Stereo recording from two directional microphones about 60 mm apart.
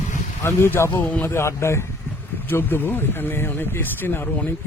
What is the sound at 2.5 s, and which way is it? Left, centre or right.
Speech, left.